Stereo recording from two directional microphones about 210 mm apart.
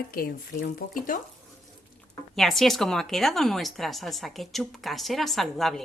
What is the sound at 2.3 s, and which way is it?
A woman's voice, centre (ahead or behind).